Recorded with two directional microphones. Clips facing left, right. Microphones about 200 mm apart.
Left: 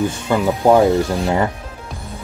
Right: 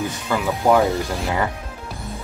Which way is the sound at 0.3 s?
30° left (ahead or behind).